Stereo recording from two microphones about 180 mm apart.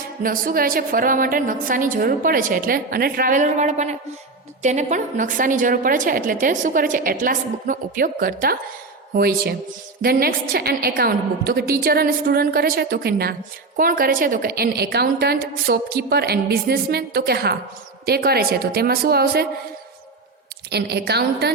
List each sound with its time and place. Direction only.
0.2 s a woman's voice: 50° right (ahead or behind)
20.7 s a woman's voice: 65° right (ahead or behind)